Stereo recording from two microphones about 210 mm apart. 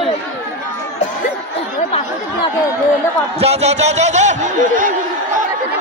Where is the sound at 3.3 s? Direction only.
30° right (ahead or behind).